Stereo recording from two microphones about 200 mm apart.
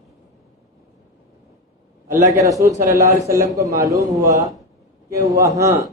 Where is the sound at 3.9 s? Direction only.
15° right (ahead or behind).